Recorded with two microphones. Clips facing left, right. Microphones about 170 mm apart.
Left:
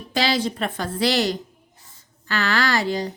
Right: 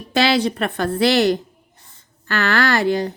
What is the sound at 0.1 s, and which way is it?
Speech, 65° right (ahead or behind).